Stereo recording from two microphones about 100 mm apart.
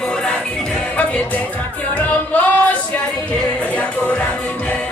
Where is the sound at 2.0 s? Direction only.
15° left (ahead or behind).